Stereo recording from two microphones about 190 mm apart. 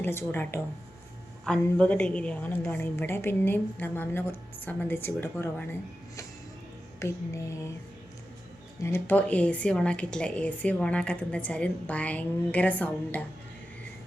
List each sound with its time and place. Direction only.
0.0 s a woman's voice: 10° left (ahead or behind)
1.6 s a woman's voice: 5° left (ahead or behind)
7.0 s a woman's voice: 15° left (ahead or behind)
8.8 s a woman's voice: 10° left (ahead or behind)